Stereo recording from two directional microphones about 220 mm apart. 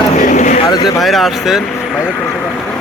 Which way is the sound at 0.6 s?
20° left (ahead or behind).